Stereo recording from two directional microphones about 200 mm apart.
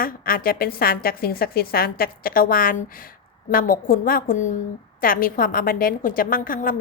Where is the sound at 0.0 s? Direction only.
45° left (ahead or behind).